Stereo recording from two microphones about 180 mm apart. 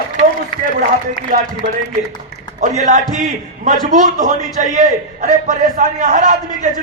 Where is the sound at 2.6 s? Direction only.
45° right (ahead or behind).